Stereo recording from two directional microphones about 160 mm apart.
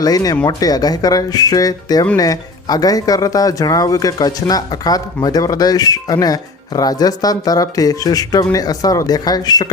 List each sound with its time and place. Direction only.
0.0 s speech: 25° left (ahead or behind)